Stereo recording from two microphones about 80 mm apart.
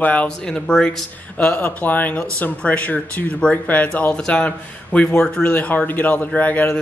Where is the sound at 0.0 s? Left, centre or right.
Centre.